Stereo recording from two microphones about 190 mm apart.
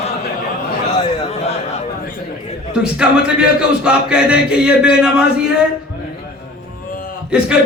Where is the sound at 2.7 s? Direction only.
5° right (ahead or behind).